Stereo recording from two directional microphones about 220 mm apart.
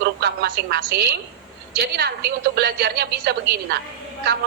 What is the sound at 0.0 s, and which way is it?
A woman's voice, 50° right (ahead or behind).